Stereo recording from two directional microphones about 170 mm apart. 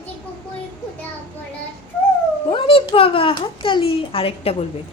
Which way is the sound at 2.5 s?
30° left (ahead or behind).